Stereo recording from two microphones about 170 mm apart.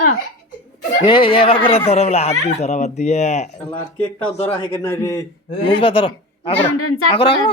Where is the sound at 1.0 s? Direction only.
30° left (ahead or behind).